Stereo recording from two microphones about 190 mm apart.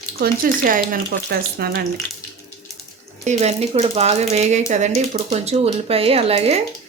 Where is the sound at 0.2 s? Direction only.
50° right (ahead or behind).